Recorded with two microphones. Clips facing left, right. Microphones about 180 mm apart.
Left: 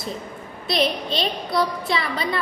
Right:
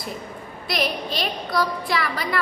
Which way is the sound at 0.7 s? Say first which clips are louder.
Left 3 dB; 25° left (ahead or behind).